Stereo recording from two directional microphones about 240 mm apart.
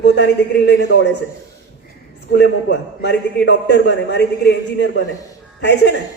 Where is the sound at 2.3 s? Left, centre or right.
Left.